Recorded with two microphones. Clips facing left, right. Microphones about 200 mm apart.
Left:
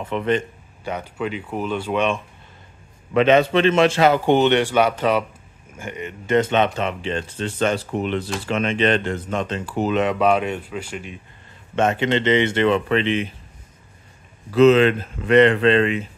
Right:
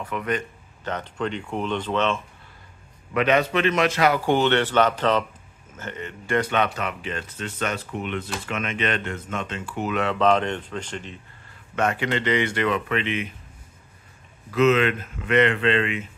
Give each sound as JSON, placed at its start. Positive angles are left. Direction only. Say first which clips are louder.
{"t": 0.0, "sound": "speech", "louder": "left 6 dB", "side_deg": 25}
{"t": 0.8, "sound": "speech", "louder": "left 2 dB", "side_deg": 10}
{"t": 3.1, "sound": "speech", "louder": "left 5 dB", "side_deg": 25}
{"t": 9.9, "sound": "speech", "louder": "left 1 dB", "side_deg": 15}
{"t": 11.7, "sound": "speech", "louder": "left 5 dB", "side_deg": 25}
{"t": 14.5, "sound": "speech", "louder": "left 6 dB", "side_deg": 30}